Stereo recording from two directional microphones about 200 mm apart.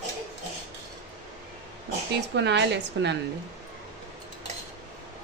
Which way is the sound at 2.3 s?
60° right (ahead or behind).